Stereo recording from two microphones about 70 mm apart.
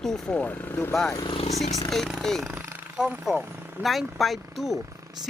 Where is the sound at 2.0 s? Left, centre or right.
Centre.